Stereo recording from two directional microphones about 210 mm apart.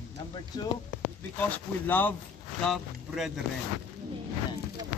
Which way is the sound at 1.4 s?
10° left (ahead or behind).